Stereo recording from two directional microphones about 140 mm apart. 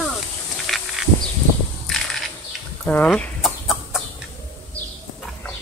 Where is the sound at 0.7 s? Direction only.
Centre (ahead or behind).